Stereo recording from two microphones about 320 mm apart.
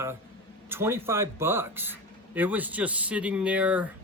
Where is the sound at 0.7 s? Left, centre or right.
Centre.